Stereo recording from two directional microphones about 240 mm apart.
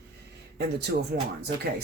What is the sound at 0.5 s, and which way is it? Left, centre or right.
Speech, right.